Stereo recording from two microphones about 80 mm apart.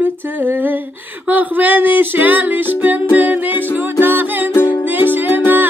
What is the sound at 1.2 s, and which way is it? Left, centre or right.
Music, right.